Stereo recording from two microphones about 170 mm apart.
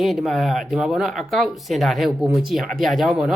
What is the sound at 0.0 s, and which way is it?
Speech, centre (ahead or behind).